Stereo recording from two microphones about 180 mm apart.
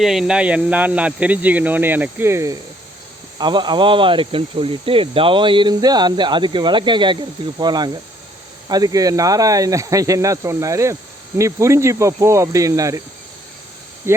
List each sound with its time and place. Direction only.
0.0 s speech: centre (ahead or behind); by 13.0 s 20° right (ahead or behind)
14.0 s speech: 15° right (ahead or behind)